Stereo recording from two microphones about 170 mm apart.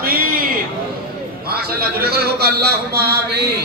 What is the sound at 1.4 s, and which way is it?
A man's voice, 65° right (ahead or behind).